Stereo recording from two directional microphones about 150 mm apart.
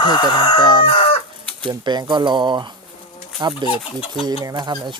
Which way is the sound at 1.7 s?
30° right (ahead or behind).